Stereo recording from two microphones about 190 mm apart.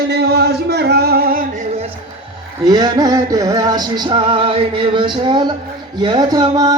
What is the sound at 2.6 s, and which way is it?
Music, 20° right (ahead or behind).